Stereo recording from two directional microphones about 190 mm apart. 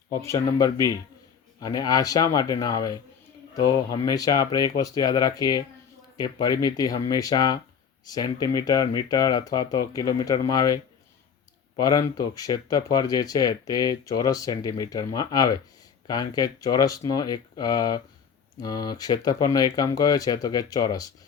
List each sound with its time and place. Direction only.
0.1 s speech: 15° left (ahead or behind)
11.8 s speech: 20° left (ahead or behind)